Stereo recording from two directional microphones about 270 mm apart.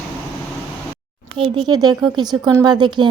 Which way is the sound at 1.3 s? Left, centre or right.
Centre.